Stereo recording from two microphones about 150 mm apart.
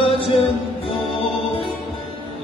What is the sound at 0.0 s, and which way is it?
Music, 35° left (ahead or behind).